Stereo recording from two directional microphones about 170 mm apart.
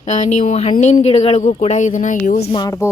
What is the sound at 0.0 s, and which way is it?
Speech, 40° left (ahead or behind).